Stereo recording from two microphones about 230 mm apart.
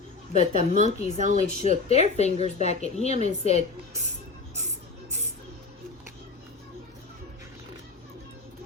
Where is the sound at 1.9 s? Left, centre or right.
Left.